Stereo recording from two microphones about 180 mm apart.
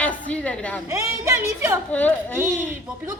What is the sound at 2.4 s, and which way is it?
Speech, 10° right (ahead or behind).